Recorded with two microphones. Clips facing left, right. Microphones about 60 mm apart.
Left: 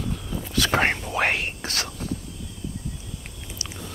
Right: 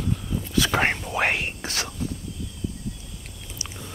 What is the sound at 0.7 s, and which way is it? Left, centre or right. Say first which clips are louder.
Whispering: left 1 dB; centre.